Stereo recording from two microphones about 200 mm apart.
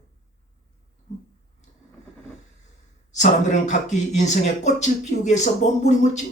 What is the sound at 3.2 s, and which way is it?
A man's voice, 35° left (ahead or behind).